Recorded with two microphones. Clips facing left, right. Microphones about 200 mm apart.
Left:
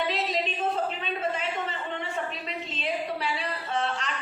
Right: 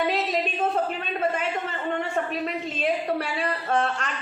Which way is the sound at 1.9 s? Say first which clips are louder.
Right 6 dB; 50° right (ahead or behind).